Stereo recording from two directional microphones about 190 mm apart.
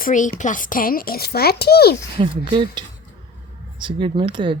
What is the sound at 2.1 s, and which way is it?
Speech, 25° right (ahead or behind).